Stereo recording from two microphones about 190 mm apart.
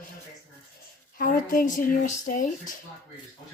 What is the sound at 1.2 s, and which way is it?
Speech, 45° left (ahead or behind).